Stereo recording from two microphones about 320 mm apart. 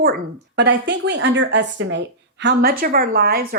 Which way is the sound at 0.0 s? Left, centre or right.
Right.